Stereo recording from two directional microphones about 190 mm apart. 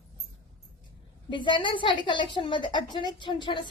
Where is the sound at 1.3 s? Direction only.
25° left (ahead or behind).